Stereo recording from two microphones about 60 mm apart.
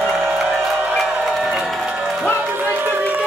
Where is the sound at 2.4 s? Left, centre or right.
Right.